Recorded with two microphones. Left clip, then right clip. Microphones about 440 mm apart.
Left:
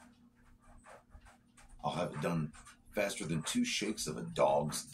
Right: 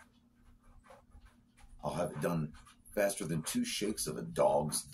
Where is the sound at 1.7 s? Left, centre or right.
Right.